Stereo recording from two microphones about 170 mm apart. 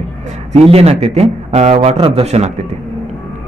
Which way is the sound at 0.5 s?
35° right (ahead or behind).